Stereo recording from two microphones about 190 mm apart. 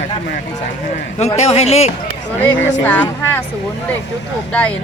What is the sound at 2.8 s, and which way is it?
Speech, 10° left (ahead or behind).